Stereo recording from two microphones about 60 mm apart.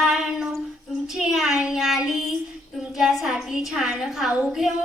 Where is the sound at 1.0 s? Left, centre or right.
Centre.